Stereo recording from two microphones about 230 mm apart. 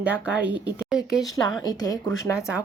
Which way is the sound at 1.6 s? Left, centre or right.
Centre.